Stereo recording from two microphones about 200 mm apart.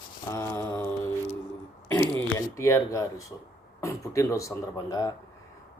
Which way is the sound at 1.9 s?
15° left (ahead or behind).